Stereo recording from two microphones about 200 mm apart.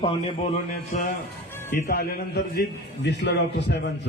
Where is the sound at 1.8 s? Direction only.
50° left (ahead or behind).